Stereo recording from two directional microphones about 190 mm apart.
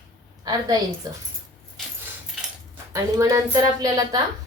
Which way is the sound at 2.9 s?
15° right (ahead or behind).